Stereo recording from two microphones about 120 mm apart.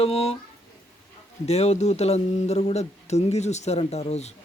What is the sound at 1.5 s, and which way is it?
Speech, 65° left (ahead or behind).